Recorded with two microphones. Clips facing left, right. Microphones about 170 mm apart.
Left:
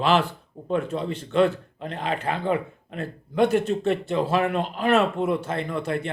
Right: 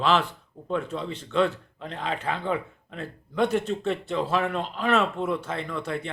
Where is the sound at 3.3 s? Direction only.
5° left (ahead or behind).